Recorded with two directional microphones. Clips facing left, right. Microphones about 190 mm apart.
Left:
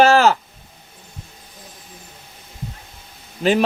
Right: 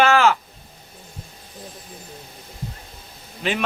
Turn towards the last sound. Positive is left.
turn(degrees=40)  # may be behind; listen again after turning